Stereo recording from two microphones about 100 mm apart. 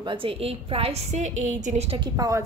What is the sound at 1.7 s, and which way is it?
Speech, 90° right.